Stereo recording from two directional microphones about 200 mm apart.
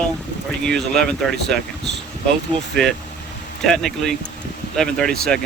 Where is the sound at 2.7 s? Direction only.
5° left (ahead or behind).